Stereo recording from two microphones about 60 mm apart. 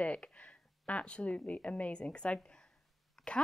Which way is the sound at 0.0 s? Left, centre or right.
Left.